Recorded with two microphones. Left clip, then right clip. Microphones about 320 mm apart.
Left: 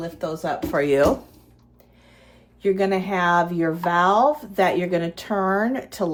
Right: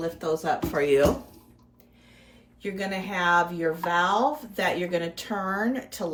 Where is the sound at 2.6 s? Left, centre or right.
Left.